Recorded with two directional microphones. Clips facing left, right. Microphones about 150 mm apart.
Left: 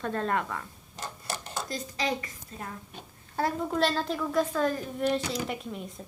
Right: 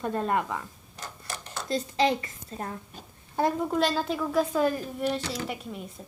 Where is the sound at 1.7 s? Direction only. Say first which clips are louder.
Right 7 dB; 30° right (ahead or behind).